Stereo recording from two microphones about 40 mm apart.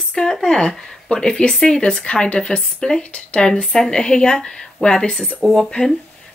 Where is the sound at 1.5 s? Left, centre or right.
Centre.